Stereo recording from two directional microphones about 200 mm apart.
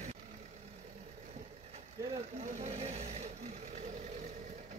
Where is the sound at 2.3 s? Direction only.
35° right (ahead or behind).